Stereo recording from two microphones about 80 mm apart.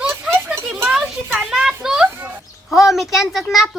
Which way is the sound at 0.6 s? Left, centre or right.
Centre.